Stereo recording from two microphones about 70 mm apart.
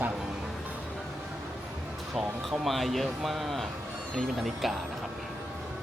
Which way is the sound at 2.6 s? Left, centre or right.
Centre.